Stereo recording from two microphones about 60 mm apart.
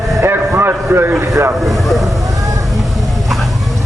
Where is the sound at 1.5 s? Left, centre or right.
Centre.